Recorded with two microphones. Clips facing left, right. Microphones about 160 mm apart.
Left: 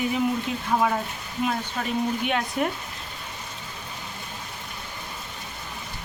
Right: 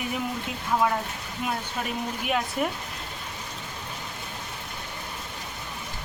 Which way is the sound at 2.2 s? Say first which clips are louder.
Left 1 dB; 5° right (ahead or behind).